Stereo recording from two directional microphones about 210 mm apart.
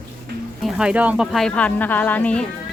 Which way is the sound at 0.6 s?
5° right (ahead or behind).